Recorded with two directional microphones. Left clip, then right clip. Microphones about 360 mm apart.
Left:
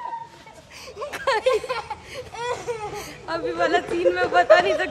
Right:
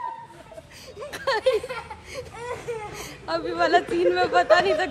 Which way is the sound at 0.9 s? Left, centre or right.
Centre.